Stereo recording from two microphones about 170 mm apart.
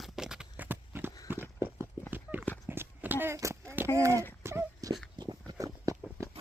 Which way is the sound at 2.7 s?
10° right (ahead or behind).